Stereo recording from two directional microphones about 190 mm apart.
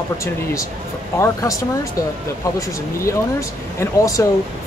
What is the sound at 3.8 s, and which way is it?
Speech, 15° left (ahead or behind).